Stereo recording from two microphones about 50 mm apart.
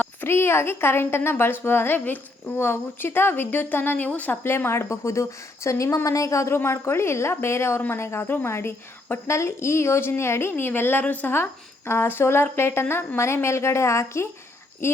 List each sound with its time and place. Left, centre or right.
0.3 s a woman's voice: left
3.9 s a woman's voice: left
4.4 s a woman's voice: left
6.6 s a woman's voice: left
10.7 s a woman's voice: left
11.0 s a woman's voice: left
11.9 s a woman's voice: left
13.1 s a woman's voice: left